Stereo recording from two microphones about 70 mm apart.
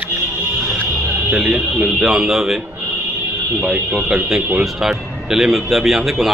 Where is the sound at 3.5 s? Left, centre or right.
Centre.